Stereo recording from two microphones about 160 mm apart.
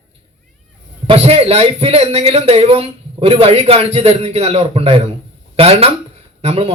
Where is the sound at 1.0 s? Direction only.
40° right (ahead or behind).